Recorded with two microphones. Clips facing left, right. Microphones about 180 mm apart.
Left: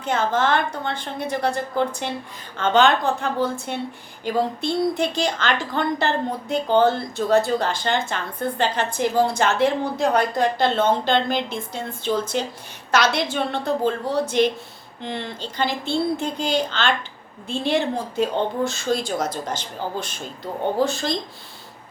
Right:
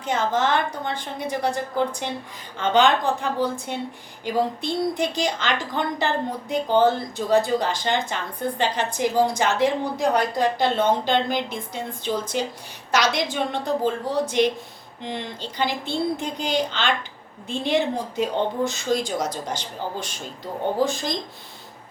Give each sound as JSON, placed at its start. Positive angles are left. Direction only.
{"t": 0.0, "sound": "speech", "side_deg": -15}